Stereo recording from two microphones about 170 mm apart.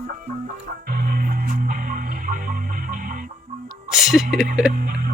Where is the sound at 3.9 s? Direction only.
Centre (ahead or behind).